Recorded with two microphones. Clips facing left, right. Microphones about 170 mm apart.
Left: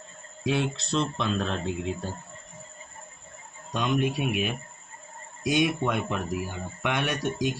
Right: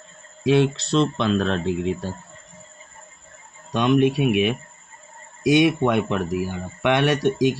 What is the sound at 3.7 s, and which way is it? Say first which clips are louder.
Speech: right 8 dB; 75° right (ahead or behind).